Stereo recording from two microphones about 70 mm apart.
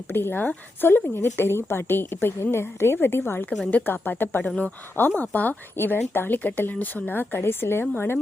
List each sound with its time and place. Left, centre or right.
0.1 s a woman's voice: left
4.4 s a woman's voice: centre